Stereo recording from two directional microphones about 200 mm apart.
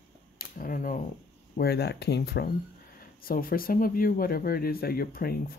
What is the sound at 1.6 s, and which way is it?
Speech, 55° left (ahead or behind).